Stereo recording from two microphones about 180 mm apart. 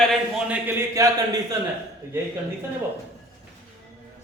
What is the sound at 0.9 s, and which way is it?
Speech, 20° right (ahead or behind).